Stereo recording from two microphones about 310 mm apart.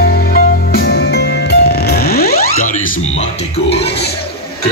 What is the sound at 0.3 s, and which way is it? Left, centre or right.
Music, left.